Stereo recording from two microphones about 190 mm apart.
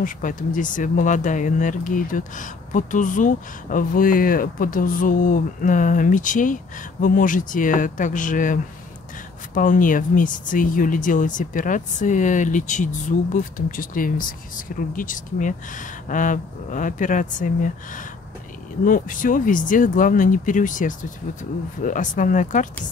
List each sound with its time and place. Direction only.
0.0 s speech: 45° left (ahead or behind)